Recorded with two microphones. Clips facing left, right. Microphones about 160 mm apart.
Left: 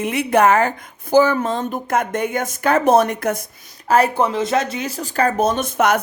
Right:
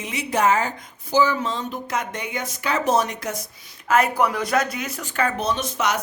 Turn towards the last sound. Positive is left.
turn(degrees=55)  # may be behind; listen again after turning